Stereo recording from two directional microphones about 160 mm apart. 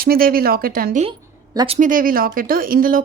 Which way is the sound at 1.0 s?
30° right (ahead or behind).